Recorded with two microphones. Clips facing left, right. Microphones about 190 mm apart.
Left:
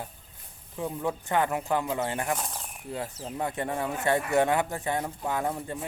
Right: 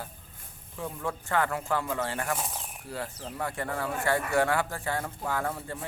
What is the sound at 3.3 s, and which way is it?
Speech, 20° left (ahead or behind).